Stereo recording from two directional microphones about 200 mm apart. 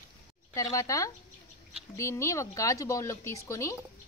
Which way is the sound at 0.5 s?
15° left (ahead or behind).